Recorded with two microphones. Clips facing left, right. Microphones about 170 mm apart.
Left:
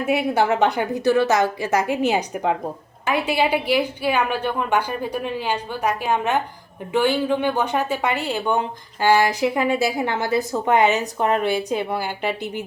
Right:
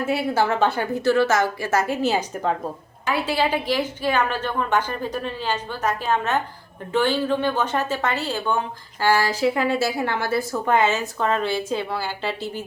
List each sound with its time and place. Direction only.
0.0 s speech: 15° left (ahead or behind)